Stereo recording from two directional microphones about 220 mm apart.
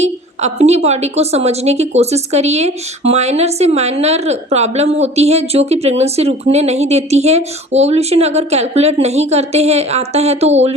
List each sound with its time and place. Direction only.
0.0 s a woman's voice: 30° right (ahead or behind)